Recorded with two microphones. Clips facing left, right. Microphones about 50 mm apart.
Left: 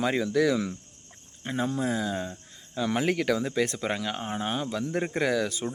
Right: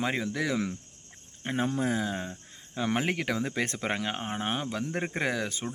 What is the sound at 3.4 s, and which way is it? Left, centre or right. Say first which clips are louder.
Speech: left 3 dB; right.